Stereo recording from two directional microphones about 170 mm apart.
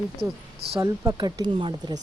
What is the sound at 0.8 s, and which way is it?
Speech, 20° right (ahead or behind).